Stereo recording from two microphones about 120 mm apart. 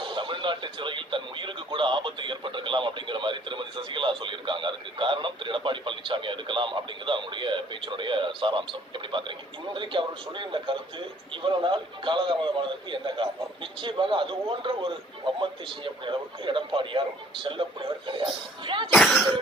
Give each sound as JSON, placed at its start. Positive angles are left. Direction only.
{"t": 0.0, "sound": "a man's voice", "side_deg": -45}
{"t": 9.7, "sound": "a man's voice", "side_deg": -45}
{"t": 18.9, "sound": "speech", "side_deg": 0}